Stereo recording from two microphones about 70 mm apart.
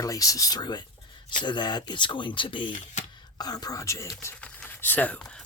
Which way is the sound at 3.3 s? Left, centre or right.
Left.